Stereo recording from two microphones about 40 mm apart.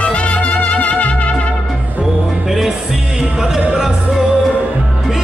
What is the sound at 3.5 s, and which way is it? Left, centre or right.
Music, centre.